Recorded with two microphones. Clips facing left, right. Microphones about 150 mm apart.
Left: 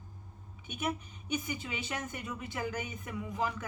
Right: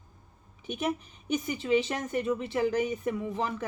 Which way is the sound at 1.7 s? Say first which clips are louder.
Right 12 dB; 30° right (ahead or behind).